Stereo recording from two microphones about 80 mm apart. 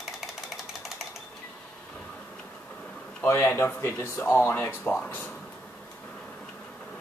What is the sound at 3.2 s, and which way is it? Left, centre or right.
A man's voice, left.